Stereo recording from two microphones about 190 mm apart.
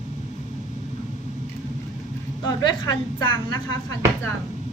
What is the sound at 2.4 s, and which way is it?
Speech, 25° left (ahead or behind).